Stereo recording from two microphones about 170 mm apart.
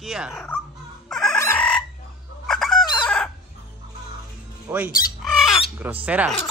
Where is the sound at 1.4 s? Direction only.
10° left (ahead or behind).